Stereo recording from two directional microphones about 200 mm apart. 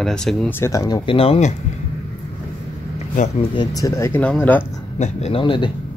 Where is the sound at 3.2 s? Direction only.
40° left (ahead or behind).